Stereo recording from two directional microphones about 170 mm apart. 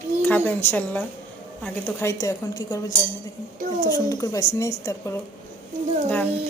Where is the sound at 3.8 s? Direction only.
20° left (ahead or behind).